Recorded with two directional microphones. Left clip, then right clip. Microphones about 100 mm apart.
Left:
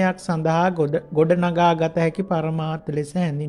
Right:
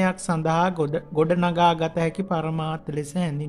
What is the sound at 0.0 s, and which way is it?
Speech, 20° left (ahead or behind).